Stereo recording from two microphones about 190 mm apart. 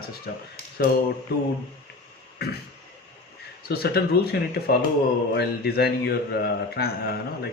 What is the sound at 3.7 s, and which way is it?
Speech, 55° left (ahead or behind).